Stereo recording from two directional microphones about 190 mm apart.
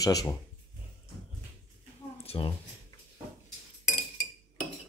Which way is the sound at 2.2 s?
30° left (ahead or behind).